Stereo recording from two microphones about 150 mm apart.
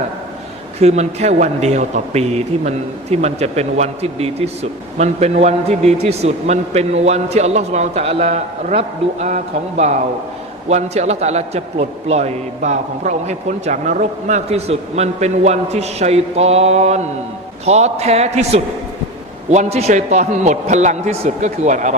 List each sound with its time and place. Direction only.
0.8 s a man's voice: 45° right (ahead or behind)